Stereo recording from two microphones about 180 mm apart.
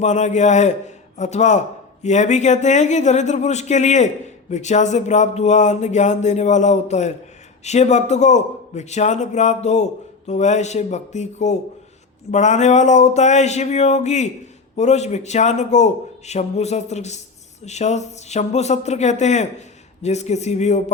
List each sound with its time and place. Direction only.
0.0 s speech: 40° left (ahead or behind)